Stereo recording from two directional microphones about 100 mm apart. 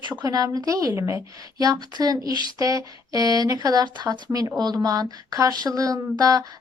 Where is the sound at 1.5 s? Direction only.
40° right (ahead or behind).